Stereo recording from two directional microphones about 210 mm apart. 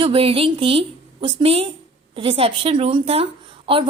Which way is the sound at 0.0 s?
25° right (ahead or behind).